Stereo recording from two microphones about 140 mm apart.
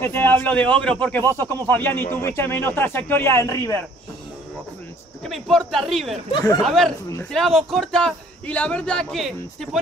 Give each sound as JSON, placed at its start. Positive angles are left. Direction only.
{"t": 0.0, "sound": "a man's voice", "side_deg": 15}
{"t": 5.2, "sound": "a man's voice", "side_deg": 5}